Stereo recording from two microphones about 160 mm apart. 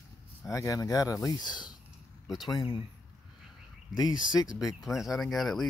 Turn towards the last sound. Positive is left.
turn(degrees=0)  # may be behind; listen again after turning